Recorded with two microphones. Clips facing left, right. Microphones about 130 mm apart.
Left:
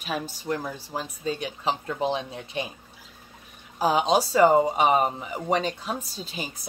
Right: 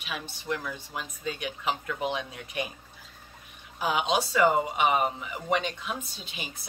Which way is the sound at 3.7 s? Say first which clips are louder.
Left 5 dB; 35° left (ahead or behind).